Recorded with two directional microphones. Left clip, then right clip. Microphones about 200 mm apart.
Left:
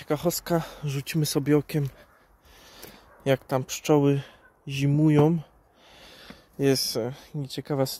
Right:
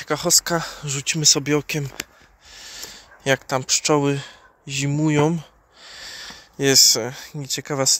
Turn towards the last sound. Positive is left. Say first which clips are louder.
# right 7 dB
turn(degrees=15)  # may be behind; listen again after turning